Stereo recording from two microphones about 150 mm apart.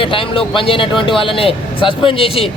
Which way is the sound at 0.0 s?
35° left (ahead or behind).